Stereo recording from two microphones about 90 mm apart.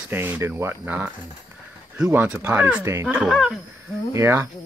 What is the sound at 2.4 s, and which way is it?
Speech, 20° right (ahead or behind).